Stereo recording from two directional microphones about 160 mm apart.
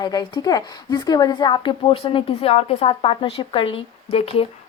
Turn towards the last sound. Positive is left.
turn(degrees=35)  # may be behind; listen again after turning